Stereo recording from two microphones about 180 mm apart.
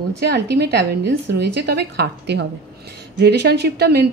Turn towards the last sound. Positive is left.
turn(degrees=-65)  # may be behind; listen again after turning